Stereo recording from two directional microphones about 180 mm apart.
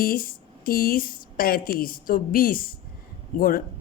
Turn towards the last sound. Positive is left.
turn(degrees=50)  # may be behind; listen again after turning